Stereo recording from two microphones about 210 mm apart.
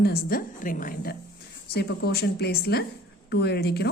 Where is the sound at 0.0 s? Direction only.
45° left (ahead or behind).